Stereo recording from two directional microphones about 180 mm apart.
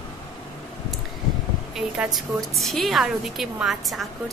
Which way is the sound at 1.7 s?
Centre (ahead or behind).